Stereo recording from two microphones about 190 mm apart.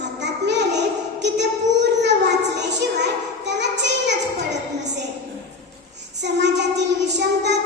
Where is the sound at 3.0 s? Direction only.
65° right (ahead or behind).